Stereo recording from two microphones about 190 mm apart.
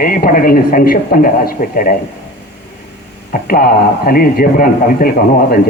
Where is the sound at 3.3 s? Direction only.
50° left (ahead or behind).